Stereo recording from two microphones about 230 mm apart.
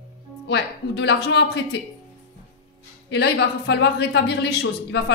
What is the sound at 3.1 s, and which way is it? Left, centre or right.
Speech, left.